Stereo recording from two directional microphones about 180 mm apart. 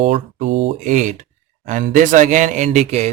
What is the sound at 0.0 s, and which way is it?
A man's voice, 40° right (ahead or behind).